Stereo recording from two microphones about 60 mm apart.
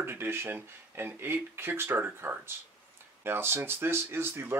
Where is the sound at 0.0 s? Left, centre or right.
Right.